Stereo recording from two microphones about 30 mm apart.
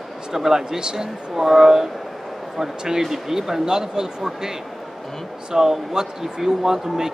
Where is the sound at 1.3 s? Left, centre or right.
Centre.